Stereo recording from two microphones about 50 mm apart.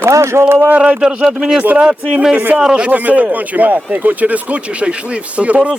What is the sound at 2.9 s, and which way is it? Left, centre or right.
Speech, right.